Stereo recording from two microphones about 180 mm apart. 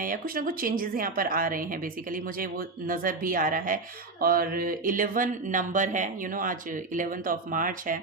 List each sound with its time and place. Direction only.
0.0 s speech: 50° right (ahead or behind)